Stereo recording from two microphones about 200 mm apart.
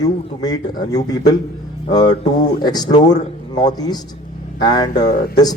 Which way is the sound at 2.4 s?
20° left (ahead or behind).